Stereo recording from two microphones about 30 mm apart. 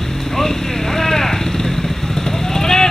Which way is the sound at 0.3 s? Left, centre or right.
Centre.